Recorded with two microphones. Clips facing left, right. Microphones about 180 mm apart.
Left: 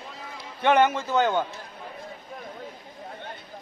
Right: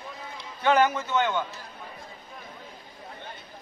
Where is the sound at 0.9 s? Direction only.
30° left (ahead or behind).